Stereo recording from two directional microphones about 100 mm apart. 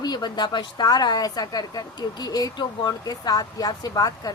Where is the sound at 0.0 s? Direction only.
45° left (ahead or behind).